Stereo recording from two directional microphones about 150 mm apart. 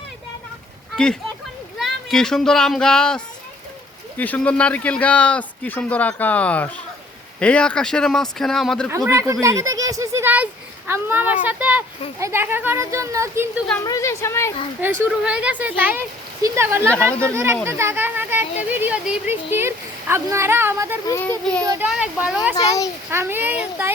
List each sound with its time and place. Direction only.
1.8 s speech: 5° left (ahead or behind)
4.2 s speech: 10° left (ahead or behind)
8.9 s a sound: 20° right (ahead or behind)
11.4 s speech: 10° right (ahead or behind)
13.8 s a woman's voice: 20° left (ahead or behind)
14.8 s speech: 10° right (ahead or behind)
21.1 s speech: 15° left (ahead or behind)
21.8 s speech: 5° right (ahead or behind)
22.5 s a woman's voice: 20° left (ahead or behind)
23.0 s speech: 15° right (ahead or behind)